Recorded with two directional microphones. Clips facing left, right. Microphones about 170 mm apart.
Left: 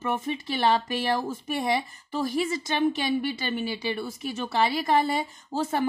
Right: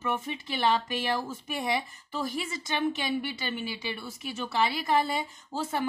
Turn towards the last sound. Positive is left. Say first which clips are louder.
# left 4 dB
turn(degrees=40)  # may be behind; listen again after turning